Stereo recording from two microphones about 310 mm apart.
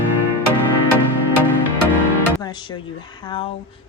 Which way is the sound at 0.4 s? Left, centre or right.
Left.